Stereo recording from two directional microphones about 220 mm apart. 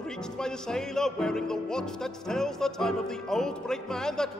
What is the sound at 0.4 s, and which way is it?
Music, 5° left (ahead or behind).